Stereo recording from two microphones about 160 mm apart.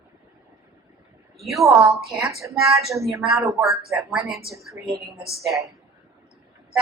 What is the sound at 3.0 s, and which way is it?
A woman's voice, centre (ahead or behind).